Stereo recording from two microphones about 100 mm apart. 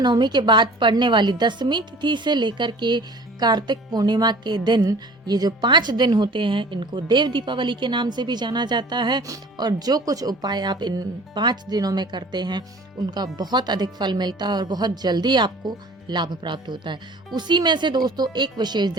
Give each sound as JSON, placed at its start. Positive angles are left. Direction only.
{"t": 0.0, "sound": "speech", "side_deg": -45}